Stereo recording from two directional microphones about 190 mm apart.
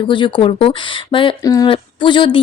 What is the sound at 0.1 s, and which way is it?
Speech, 25° left (ahead or behind).